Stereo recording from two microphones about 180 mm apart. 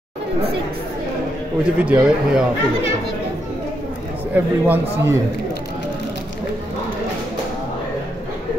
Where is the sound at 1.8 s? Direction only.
10° right (ahead or behind).